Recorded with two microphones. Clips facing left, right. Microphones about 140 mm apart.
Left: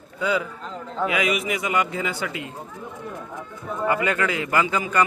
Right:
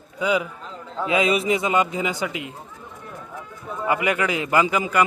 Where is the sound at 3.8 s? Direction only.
15° right (ahead or behind).